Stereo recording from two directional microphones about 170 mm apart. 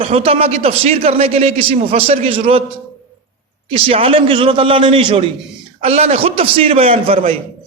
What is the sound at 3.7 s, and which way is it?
A man's voice, 35° right (ahead or behind).